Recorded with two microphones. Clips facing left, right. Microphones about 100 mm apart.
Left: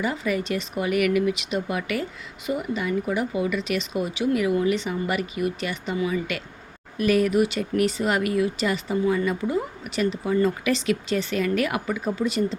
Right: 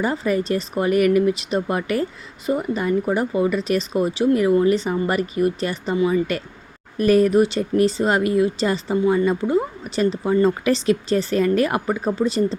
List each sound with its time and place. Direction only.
0.0 s speech: 40° right (ahead or behind)